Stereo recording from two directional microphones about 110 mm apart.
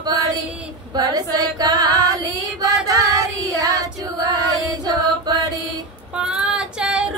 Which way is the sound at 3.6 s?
35° right (ahead or behind).